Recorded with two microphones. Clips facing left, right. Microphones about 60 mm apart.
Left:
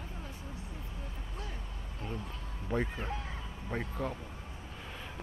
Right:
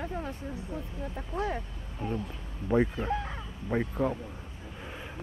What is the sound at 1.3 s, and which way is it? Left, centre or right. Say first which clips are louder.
Speech: right 15 dB; right.